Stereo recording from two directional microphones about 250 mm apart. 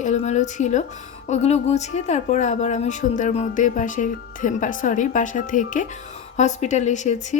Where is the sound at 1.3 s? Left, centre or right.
Left.